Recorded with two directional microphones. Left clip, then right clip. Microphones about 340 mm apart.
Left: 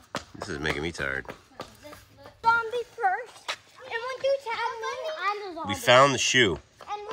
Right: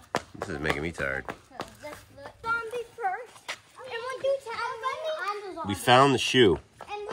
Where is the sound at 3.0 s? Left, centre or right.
Left.